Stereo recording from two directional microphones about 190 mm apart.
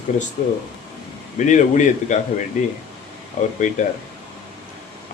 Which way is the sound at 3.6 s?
40° left (ahead or behind).